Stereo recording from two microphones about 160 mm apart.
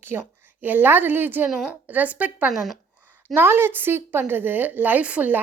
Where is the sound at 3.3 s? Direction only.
15° right (ahead or behind).